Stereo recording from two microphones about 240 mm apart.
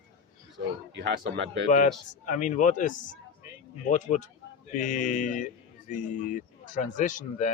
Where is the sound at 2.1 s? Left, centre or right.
Left.